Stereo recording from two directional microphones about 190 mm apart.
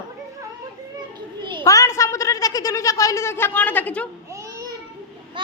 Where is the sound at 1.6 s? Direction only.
15° left (ahead or behind).